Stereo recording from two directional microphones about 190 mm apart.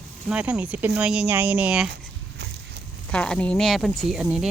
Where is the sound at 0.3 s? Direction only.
5° right (ahead or behind).